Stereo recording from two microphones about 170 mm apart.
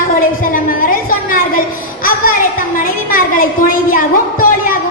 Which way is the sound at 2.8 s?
55° left (ahead or behind).